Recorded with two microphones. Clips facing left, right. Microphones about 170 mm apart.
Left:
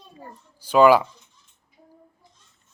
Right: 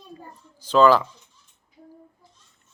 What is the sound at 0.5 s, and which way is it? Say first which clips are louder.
Speech: left 1 dB; 10° left (ahead or behind).